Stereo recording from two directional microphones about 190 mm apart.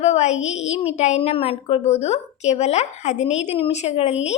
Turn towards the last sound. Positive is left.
turn(degrees=35)  # may be behind; listen again after turning